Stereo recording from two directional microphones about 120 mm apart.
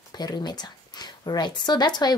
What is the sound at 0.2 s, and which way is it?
Speech, 35° left (ahead or behind).